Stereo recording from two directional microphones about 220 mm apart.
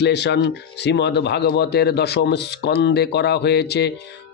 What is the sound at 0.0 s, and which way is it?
Speech, 50° left (ahead or behind).